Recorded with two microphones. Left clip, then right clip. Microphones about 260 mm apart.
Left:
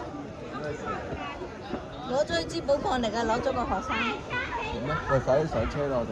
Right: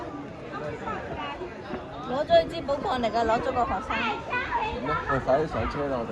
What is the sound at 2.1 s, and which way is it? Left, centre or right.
Speech, left.